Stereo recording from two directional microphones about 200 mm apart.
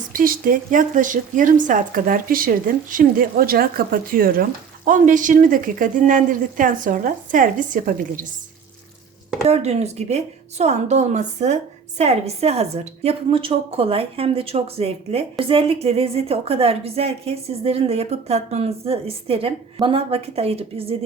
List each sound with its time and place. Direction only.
0.1 s a woman's voice: 45° right (ahead or behind)
9.5 s a woman's voice: 30° right (ahead or behind)